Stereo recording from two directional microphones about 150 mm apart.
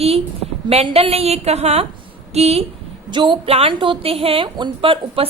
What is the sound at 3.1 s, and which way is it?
A woman's voice, 35° right (ahead or behind).